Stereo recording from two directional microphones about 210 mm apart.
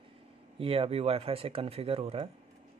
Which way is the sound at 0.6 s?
25° right (ahead or behind).